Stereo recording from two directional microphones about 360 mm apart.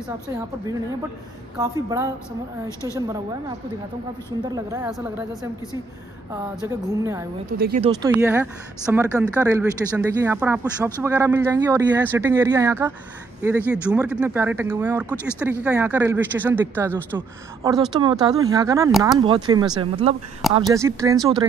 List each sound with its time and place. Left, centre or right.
1.6 s speech: centre
4.4 s speech: centre
6.9 s speech: centre
7.5 s speech: right
7.9 s speech: centre